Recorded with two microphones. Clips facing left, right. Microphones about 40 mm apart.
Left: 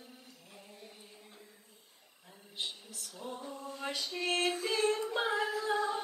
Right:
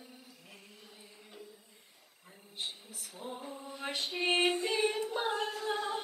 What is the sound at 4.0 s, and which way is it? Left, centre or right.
Female singing, right.